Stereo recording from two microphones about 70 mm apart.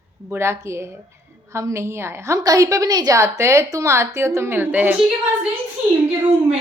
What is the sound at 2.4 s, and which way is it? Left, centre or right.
Speech, right.